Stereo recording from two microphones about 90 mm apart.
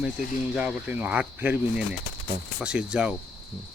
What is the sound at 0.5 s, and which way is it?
Speech, 15° right (ahead or behind).